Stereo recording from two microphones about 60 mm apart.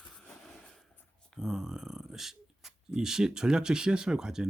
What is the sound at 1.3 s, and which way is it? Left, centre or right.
Speech, centre.